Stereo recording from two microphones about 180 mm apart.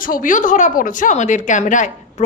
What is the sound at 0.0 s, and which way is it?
A woman's voice, 50° left (ahead or behind).